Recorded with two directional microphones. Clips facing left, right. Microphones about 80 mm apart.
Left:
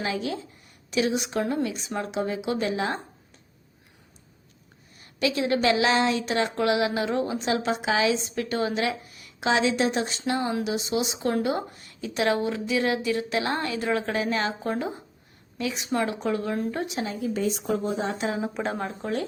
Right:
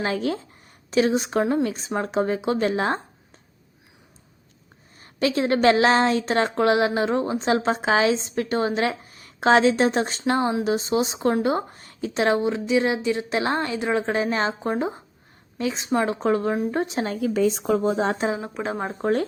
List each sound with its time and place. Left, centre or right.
0.0 s speech: right
4.9 s speech: right
17.2 s speech: right
18.3 s speech: centre
19.0 s speech: right